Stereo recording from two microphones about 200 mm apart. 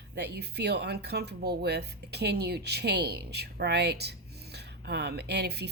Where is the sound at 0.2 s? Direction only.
55° right (ahead or behind).